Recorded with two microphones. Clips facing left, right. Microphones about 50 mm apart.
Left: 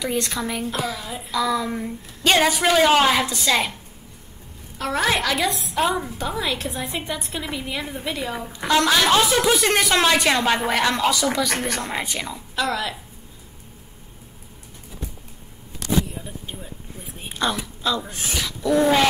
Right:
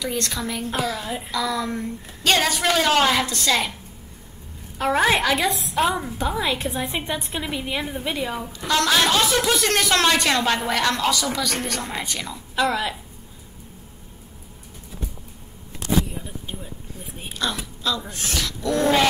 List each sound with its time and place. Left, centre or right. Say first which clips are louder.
0.0 s a woman's voice: left 2 dB; centre
1.0 s a woman's voice: right 3 dB; right
1.3 s a woman's voice: left 3 dB; centre
4.7 s a woman's voice: right 3 dB; centre
8.5 s a woman's voice: left 2 dB; centre
12.5 s a woman's voice: right 2 dB; centre
16.1 s vehicle: right 1 dB; centre
17.4 s a woman's voice: left 3 dB; centre